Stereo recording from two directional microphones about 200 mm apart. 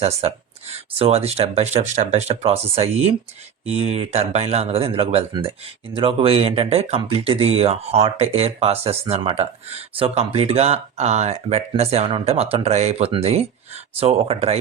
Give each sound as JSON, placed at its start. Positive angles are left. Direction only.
{"t": 0.0, "sound": "speech", "side_deg": -30}